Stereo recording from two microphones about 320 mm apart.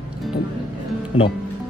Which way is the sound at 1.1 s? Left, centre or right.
Centre.